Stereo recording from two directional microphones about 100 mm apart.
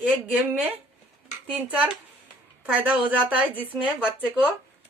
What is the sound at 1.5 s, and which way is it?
Speech, 15° right (ahead or behind).